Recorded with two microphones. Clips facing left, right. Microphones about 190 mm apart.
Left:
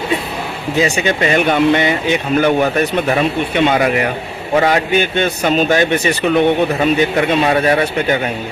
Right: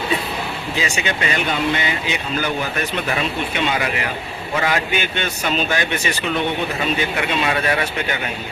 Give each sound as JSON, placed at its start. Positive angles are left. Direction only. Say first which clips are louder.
{"t": 0.8, "sound": "speech", "louder": "left 9 dB", "side_deg": 40}
{"t": 2.7, "sound": "speech", "louder": "left 8 dB", "side_deg": 45}
{"t": 7.2, "sound": "speech", "louder": "left 7 dB", "side_deg": 40}